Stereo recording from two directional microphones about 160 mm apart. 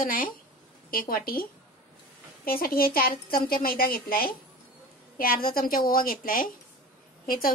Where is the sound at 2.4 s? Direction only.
65° left (ahead or behind).